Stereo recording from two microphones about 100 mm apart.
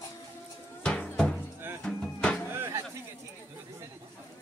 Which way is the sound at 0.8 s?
10° left (ahead or behind).